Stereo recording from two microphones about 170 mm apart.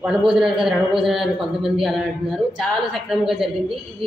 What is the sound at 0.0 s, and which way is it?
A man's voice, 5° right (ahead or behind).